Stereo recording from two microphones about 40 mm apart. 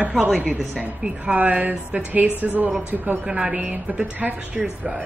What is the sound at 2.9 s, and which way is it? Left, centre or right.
Speech, centre.